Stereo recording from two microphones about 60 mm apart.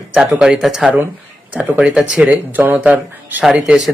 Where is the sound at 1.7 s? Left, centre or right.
Centre.